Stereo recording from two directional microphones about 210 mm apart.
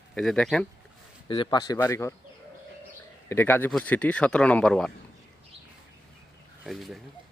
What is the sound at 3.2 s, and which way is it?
Speech, 10° left (ahead or behind).